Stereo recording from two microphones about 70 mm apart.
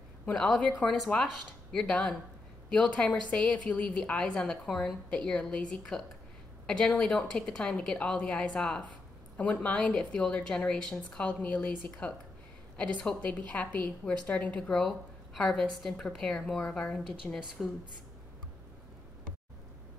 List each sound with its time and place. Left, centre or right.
0.6 s a woman's voice: centre
0.9 s a woman's voice: centre
9.4 s a woman's voice: left
14.7 s a woman's voice: centre
17.3 s a woman's voice: left